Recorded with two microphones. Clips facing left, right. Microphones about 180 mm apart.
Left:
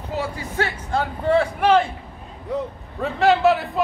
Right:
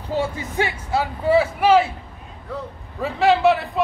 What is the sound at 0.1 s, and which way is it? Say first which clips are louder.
Speech: right 4 dB; 25° right (ahead or behind).